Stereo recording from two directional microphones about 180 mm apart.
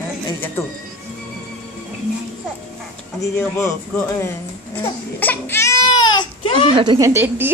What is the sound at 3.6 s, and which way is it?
Crying, 15° left (ahead or behind).